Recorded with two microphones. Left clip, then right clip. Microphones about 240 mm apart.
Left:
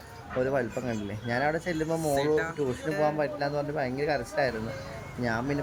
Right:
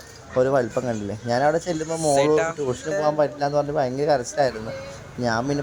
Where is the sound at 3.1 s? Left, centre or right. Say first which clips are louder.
Right 8 dB; centre.